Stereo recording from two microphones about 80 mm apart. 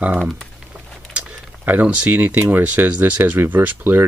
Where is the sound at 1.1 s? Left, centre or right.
Right.